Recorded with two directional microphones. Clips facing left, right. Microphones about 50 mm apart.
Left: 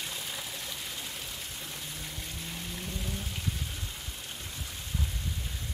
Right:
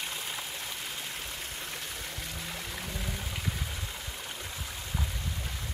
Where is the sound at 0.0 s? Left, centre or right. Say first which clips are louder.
Right 2 dB; right.